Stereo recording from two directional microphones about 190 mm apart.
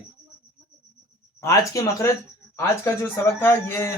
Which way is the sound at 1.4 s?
15° left (ahead or behind).